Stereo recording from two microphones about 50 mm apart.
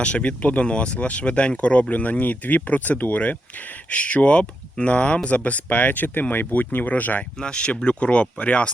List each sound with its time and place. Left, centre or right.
0.0 s speech: left
7.4 s speech: left